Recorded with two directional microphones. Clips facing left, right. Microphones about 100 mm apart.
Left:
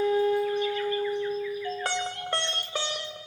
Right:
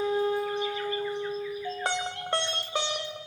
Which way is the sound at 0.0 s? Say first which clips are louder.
Left 3 dB; 25° right (ahead or behind).